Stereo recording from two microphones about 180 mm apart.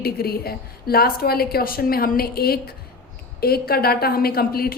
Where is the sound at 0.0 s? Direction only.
60° left (ahead or behind).